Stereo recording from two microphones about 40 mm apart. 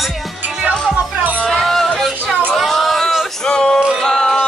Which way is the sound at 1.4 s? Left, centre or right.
Centre.